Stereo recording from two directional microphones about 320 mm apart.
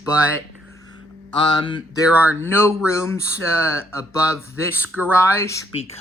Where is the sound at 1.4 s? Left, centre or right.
Centre.